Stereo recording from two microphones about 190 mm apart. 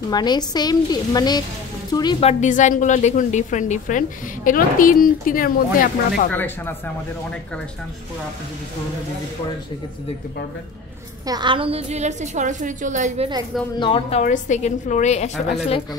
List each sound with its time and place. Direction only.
0.1 s a woman's voice: 20° left (ahead or behind)
2.1 s a woman's voice: 35° left (ahead or behind)
6.3 s speech: 10° left (ahead or behind)
11.2 s a woman's voice: 25° right (ahead or behind); by 13.3 s 40° right (ahead or behind)
13.7 s a woman's voice: 25° left (ahead or behind)
14.2 s a woman's voice: 40° left (ahead or behind)